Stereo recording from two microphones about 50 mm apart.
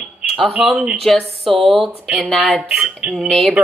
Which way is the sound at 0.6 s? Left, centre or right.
Centre.